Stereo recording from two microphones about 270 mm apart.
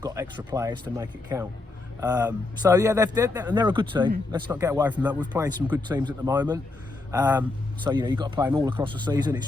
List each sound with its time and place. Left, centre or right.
0.0 s a man's voice: centre